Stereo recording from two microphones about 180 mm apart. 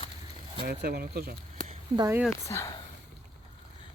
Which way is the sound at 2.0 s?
15° right (ahead or behind).